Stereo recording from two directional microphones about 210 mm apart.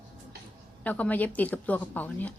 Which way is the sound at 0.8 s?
5° left (ahead or behind).